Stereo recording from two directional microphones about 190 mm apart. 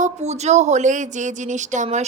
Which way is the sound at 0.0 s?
35° right (ahead or behind).